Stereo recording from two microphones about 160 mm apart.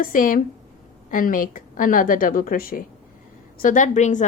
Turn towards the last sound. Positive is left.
turn(degrees=50)  # may be behind; listen again after turning